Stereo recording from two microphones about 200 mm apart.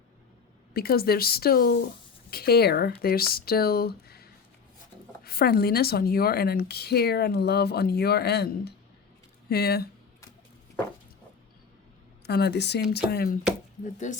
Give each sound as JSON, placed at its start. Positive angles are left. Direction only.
{"t": 0.7, "sound": "speech", "side_deg": 50}
{"t": 12.2, "sound": "a woman's voice", "side_deg": 55}
{"t": 14.0, "sound": "speech", "side_deg": 35}